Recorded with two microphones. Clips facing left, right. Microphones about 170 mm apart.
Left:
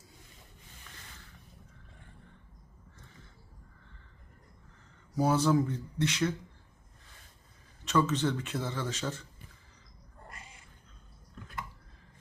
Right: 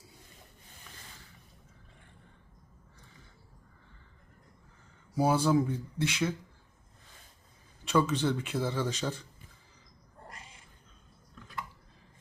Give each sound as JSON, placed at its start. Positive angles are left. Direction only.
{"t": 5.1, "sound": "speech", "side_deg": -10}
{"t": 7.9, "sound": "speech", "side_deg": -10}